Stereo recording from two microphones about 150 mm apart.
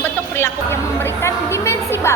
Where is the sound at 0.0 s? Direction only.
15° left (ahead or behind).